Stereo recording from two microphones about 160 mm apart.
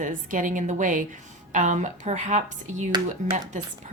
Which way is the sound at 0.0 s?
55° right (ahead or behind).